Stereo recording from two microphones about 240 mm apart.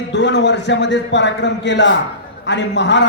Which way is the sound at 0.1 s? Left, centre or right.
Left.